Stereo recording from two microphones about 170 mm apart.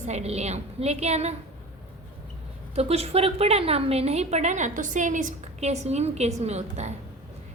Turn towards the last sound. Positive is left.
turn(degrees=-40)  # may be behind; listen again after turning